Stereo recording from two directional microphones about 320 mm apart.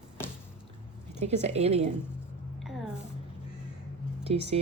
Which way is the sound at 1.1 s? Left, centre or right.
Right.